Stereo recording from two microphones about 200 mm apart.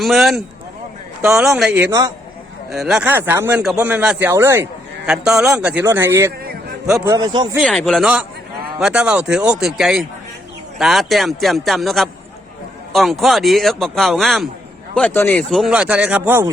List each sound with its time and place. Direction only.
0.0 s a man's voice: centre (ahead or behind); by 2.1 s 15° right (ahead or behind)
2.7 s speech: 5° right (ahead or behind); by 7.5 s 20° right (ahead or behind)
7.9 s a man's voice: centre (ahead or behind)